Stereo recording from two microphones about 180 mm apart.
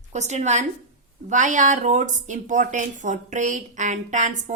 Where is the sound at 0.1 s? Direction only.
40° right (ahead or behind).